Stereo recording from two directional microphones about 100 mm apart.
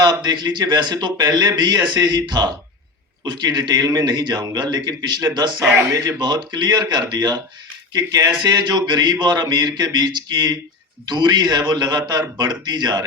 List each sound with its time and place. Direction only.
0.0 s a man's voice: 45° right (ahead or behind)